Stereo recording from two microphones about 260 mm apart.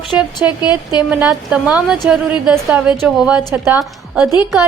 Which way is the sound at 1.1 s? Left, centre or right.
Centre.